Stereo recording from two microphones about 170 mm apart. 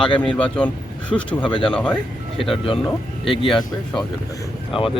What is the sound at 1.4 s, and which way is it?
Speech, 30° left (ahead or behind).